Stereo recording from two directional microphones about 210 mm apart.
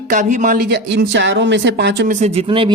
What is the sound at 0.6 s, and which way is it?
Speech, 50° right (ahead or behind).